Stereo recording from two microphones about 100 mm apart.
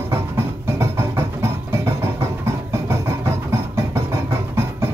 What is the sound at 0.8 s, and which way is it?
Music, 25° right (ahead or behind).